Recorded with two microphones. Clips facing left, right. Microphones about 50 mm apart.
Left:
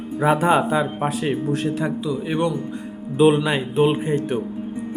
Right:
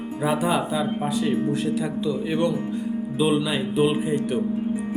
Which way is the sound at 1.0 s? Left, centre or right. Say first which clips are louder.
Left 1 dB; left.